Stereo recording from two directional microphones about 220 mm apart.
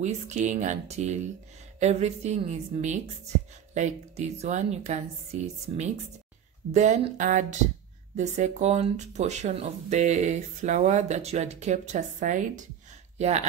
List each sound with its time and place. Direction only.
0.0 s speech: 30° right (ahead or behind)